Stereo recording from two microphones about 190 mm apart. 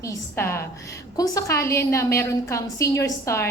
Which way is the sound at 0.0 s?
15° left (ahead or behind).